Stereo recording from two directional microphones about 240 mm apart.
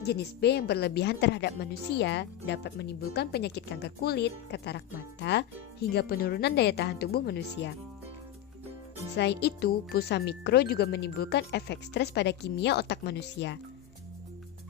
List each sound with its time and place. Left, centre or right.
0.0 s a woman's voice: left
9.1 s a woman's voice: left